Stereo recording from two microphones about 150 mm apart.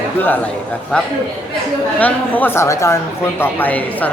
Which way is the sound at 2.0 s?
10° left (ahead or behind).